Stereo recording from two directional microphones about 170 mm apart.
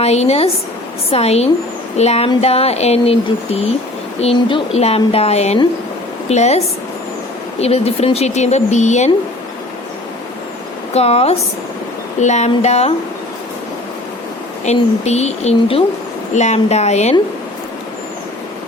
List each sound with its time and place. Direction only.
0.0 s speech: 40° left (ahead or behind)
7.6 s speech: 35° left (ahead or behind)
10.9 s speech: 35° left (ahead or behind)
14.6 s speech: 40° left (ahead or behind)